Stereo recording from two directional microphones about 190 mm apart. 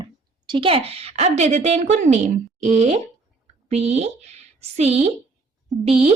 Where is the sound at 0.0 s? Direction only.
25° right (ahead or behind).